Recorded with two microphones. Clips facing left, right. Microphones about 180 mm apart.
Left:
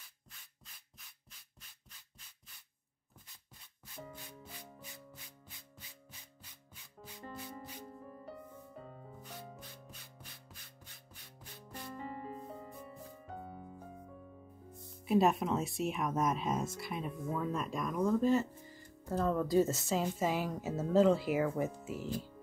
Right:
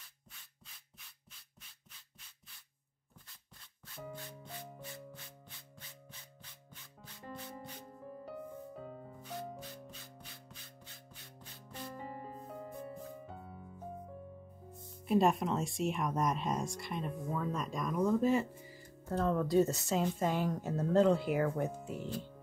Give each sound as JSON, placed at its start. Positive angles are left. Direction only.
{"t": 12.0, "sound": "music", "side_deg": 0}
{"t": 15.0, "sound": "speech", "side_deg": 0}
{"t": 19.0, "sound": "speech", "side_deg": 0}